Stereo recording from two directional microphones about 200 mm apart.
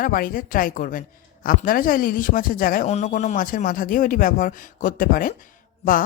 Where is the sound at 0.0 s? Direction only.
45° left (ahead or behind).